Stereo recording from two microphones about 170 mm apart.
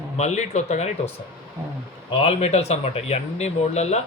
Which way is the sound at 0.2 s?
40° left (ahead or behind).